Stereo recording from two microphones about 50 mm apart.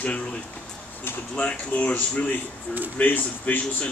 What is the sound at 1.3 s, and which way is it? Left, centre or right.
A man's voice, left.